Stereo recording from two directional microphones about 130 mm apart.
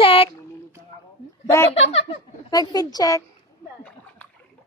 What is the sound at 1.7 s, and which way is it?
Speech, 50° left (ahead or behind).